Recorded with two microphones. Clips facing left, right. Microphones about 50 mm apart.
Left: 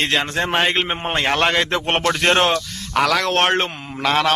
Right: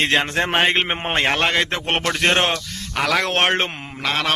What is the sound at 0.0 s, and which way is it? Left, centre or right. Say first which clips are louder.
Speech: right 1 dB; centre.